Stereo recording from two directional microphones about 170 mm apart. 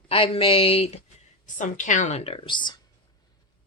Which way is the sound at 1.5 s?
50° left (ahead or behind).